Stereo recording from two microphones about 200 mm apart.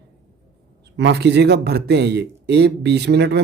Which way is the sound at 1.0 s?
60° right (ahead or behind).